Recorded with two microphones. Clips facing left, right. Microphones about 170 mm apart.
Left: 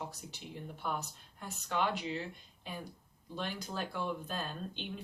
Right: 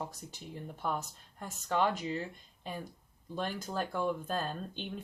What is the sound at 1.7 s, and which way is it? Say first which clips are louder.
Speech: right 3 dB; 45° right (ahead or behind).